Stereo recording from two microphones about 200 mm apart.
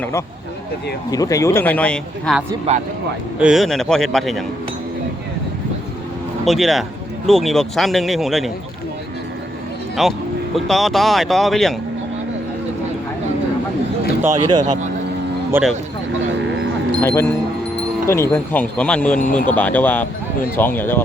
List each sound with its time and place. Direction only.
0.0 s speech: 15° left (ahead or behind)
2.7 s speech: 30° right (ahead or behind)
3.3 s speech: 5° right (ahead or behind)
6.4 s speech: centre (ahead or behind)
10.0 s speech: centre (ahead or behind)
14.2 s speech: 15° right (ahead or behind)
17.0 s speech: 15° left (ahead or behind)